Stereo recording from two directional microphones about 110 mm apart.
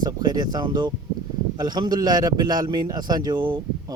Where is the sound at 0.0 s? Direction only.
40° right (ahead or behind).